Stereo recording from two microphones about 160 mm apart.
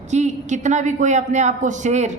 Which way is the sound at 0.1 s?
45° right (ahead or behind).